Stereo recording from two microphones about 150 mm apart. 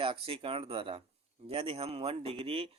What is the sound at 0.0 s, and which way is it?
Speech, 40° right (ahead or behind).